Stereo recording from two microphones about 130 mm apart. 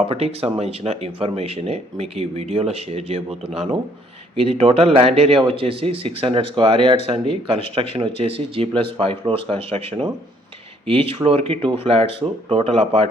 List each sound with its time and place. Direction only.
0.1 s speech: 50° right (ahead or behind)
4.4 s speech: 45° right (ahead or behind)